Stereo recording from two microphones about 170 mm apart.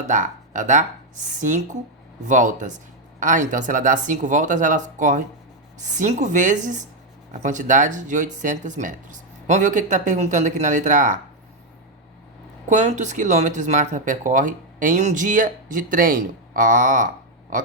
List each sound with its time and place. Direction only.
0.1 s speech: 50° right (ahead or behind)
12.6 s speech: 45° right (ahead or behind)